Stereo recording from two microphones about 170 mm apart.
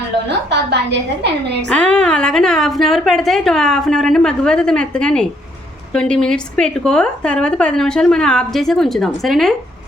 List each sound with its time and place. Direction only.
0.3 s a woman's voice: 80° right
1.6 s a woman's voice: 5° left (ahead or behind)